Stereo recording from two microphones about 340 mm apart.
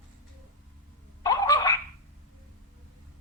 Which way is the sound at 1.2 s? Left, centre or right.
Centre.